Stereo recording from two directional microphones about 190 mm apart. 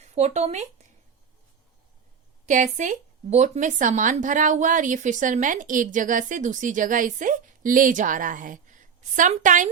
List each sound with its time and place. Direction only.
0.0 s speech: 35° right (ahead or behind)
2.5 s speech: 40° right (ahead or behind)